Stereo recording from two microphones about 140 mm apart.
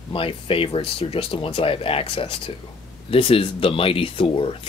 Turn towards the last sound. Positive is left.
turn(degrees=40)  # may be behind; listen again after turning